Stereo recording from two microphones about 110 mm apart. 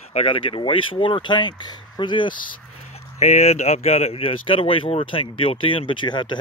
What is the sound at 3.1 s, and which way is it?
Speech, 85° left.